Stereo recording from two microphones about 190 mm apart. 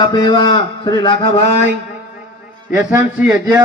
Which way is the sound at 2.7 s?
10° right (ahead or behind).